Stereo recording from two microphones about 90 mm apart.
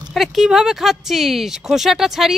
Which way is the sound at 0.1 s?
Centre (ahead or behind).